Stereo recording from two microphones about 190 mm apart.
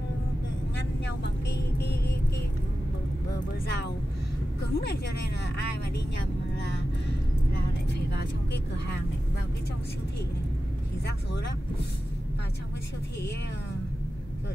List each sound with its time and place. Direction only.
0.7 s vehicle: 65° left (ahead or behind)
3.3 s vehicle: 60° left (ahead or behind)
4.7 s speech: 60° left (ahead or behind)
6.5 s music: 60° left (ahead or behind)